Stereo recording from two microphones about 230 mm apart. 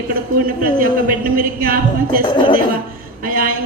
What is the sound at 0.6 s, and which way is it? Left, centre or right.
A woman's voice, right.